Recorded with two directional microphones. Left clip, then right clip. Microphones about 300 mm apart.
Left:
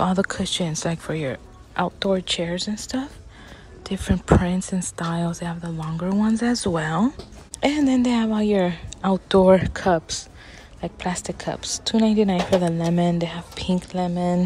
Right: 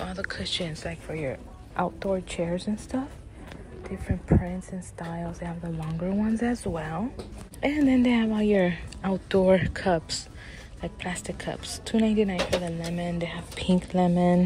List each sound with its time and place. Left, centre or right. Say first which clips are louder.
0.0 s speech: left 10 dB; centre
11.6 s a woman's voice: left 10 dB; left
11.9 s speech: left 5 dB; centre